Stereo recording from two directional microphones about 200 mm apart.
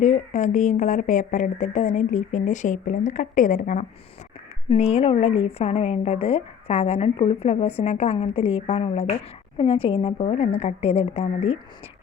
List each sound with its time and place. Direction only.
0.0 s speech: 35° left (ahead or behind)